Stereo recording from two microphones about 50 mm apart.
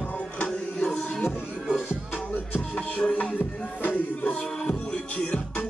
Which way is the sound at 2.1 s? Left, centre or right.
Left.